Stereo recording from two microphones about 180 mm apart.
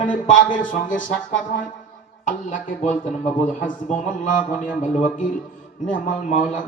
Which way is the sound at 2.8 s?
40° left (ahead or behind).